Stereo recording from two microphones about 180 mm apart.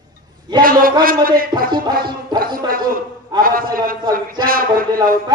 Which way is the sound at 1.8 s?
55° right (ahead or behind).